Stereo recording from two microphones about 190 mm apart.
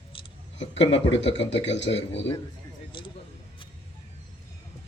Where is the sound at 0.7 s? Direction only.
70° left (ahead or behind).